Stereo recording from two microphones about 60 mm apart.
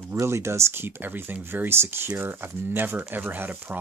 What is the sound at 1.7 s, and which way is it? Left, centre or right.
Speech, right.